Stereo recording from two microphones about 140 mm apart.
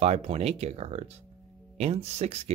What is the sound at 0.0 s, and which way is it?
Speech, 45° right (ahead or behind).